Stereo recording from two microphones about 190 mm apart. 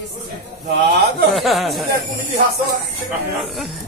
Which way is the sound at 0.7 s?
60° right (ahead or behind).